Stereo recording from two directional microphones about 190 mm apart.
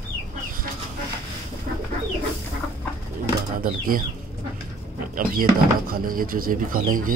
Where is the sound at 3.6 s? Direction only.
50° right (ahead or behind).